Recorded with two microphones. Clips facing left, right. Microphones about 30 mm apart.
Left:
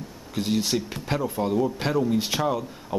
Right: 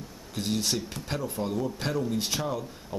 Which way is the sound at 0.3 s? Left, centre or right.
Centre.